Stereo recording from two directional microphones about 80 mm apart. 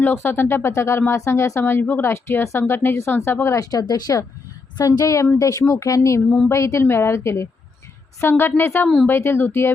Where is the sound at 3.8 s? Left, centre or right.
Left.